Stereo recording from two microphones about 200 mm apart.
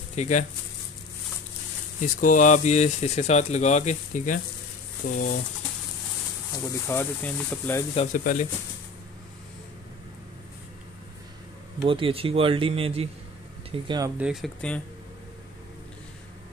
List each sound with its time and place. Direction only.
0.1 s speech: 35° left (ahead or behind)
2.0 s speech: 40° left (ahead or behind)
6.5 s speech: 15° left (ahead or behind)
7.9 s speech: 35° left (ahead or behind)
11.8 s speech: 25° right (ahead or behind)
14.1 s speech: 5° right (ahead or behind)